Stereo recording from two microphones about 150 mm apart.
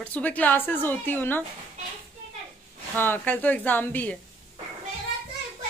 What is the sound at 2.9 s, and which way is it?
Speech, 15° left (ahead or behind).